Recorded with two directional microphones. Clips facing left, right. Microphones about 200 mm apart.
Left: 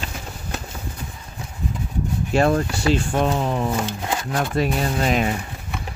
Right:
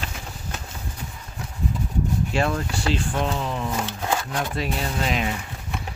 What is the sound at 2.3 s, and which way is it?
Speech, 45° left (ahead or behind).